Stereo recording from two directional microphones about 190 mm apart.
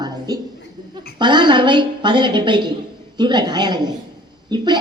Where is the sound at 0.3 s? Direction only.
20° right (ahead or behind).